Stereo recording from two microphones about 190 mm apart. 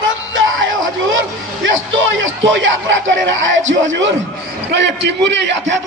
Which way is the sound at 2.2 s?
80° right.